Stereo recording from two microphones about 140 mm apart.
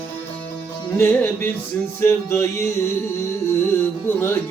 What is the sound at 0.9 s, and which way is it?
Music, 15° left (ahead or behind).